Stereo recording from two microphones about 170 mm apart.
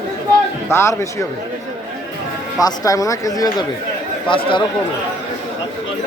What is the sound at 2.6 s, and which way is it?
Speech, 20° left (ahead or behind).